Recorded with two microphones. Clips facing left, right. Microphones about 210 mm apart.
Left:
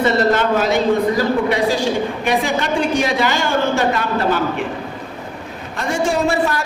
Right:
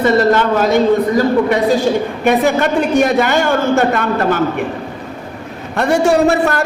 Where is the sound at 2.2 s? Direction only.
50° right (ahead or behind).